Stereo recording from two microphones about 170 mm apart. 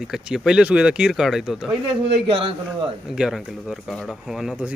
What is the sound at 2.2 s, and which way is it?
Speech, 35° right (ahead or behind).